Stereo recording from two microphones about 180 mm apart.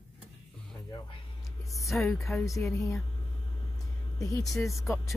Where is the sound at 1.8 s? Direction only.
Centre (ahead or behind).